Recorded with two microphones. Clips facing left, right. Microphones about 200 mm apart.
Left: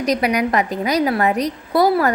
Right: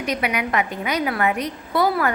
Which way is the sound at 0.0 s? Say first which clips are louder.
Left 6 dB; 35° left (ahead or behind).